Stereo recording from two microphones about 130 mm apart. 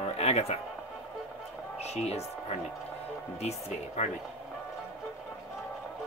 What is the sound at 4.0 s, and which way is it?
Speech, 55° left (ahead or behind).